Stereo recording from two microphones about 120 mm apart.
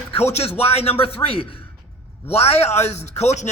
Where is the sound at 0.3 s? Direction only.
55° left (ahead or behind).